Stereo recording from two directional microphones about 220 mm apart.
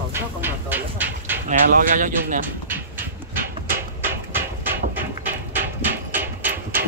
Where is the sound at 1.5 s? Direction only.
35° right (ahead or behind).